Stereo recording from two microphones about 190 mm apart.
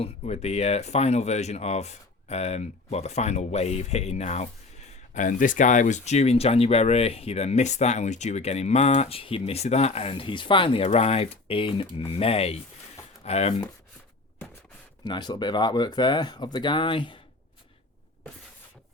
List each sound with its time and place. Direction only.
0.0 s speech: 35° left (ahead or behind)
15.0 s speech: 20° left (ahead or behind)